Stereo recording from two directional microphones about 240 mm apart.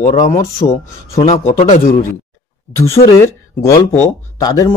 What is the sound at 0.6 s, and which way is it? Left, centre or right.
Speech, left.